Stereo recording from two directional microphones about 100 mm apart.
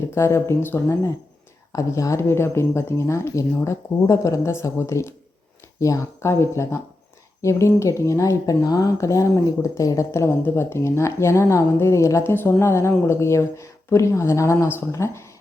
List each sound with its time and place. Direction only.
0.1 s speech: 25° left (ahead or behind)